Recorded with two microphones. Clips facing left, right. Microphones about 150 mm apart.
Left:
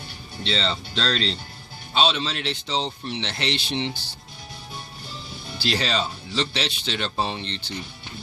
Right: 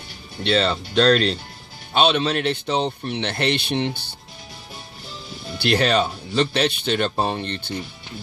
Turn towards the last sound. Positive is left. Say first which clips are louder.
# right 5 dB
turn(degrees=-55)  # may be behind; listen again after turning